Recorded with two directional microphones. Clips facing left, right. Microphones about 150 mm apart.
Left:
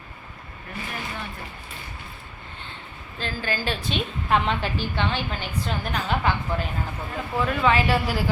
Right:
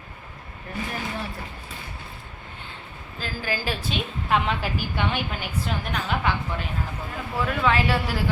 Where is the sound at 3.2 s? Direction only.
10° right (ahead or behind).